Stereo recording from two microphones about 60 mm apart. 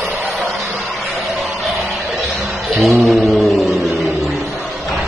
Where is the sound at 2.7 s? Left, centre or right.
Centre.